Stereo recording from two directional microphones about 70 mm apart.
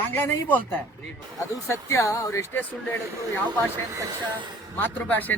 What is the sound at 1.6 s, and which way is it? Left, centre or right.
Speech, left.